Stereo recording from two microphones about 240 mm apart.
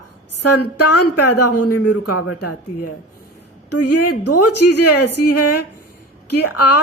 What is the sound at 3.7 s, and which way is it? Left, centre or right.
Speech, left.